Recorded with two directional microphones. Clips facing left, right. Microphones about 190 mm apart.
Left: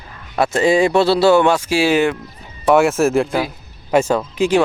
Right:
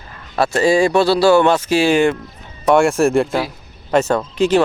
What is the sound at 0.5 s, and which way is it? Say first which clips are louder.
Speech: even; 20° left (ahead or behind).